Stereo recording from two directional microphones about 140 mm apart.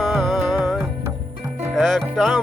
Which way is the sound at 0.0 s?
Centre (ahead or behind).